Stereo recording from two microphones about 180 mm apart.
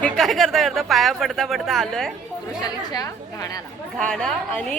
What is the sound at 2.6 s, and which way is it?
A woman's voice, 20° left (ahead or behind).